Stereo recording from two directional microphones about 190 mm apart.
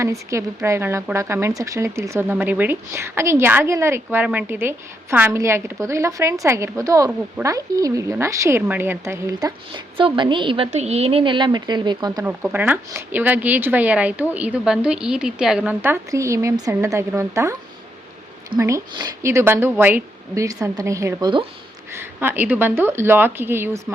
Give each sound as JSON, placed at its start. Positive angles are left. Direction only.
{"t": 0.0, "sound": "a woman's voice", "side_deg": -15}
{"t": 12.2, "sound": "a woman's voice", "side_deg": -10}
{"t": 18.5, "sound": "a woman's voice", "side_deg": -20}
{"t": 21.9, "sound": "a woman's voice", "side_deg": -10}